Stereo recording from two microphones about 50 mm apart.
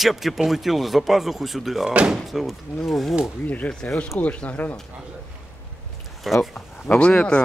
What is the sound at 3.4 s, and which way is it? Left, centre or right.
Speech, left.